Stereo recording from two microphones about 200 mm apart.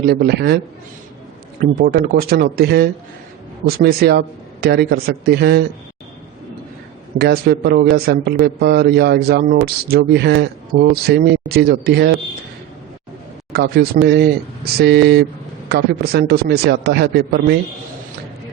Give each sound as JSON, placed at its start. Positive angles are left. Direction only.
{"t": 0.0, "sound": "a man's voice", "side_deg": -55}
{"t": 1.6, "sound": "a man's voice", "side_deg": -50}
{"t": 7.2, "sound": "a man's voice", "side_deg": -55}
{"t": 13.5, "sound": "a man's voice", "side_deg": -55}